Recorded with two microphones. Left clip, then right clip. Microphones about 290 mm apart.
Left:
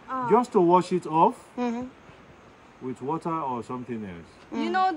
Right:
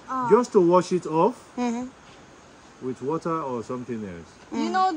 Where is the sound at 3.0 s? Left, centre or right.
Centre.